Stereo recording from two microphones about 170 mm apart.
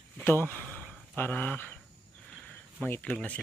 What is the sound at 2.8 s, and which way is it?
Speech, 10° left (ahead or behind).